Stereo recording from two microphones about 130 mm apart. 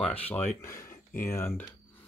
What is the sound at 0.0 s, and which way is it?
Speech, 10° left (ahead or behind).